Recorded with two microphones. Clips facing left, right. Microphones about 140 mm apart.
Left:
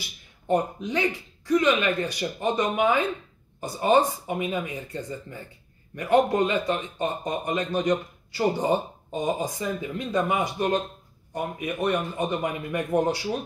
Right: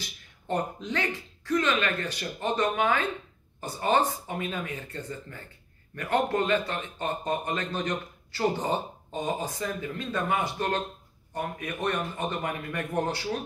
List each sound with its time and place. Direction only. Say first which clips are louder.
0.0 s speech: left 1 dB; 10° left (ahead or behind)